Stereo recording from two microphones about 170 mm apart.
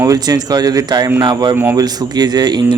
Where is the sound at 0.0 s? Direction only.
20° right (ahead or behind).